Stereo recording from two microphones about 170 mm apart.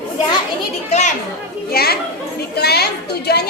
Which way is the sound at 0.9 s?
40° left (ahead or behind).